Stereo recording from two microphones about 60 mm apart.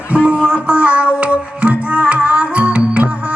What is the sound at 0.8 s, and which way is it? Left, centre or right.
Music, right.